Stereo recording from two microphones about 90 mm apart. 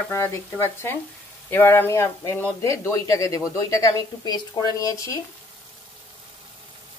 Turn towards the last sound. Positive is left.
turn(degrees=35)  # may be behind; listen again after turning